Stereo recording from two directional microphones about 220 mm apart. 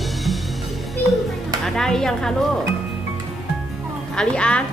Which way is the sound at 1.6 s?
Centre (ahead or behind).